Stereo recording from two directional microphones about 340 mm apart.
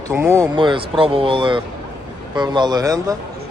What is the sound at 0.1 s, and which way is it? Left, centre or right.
Speech, centre.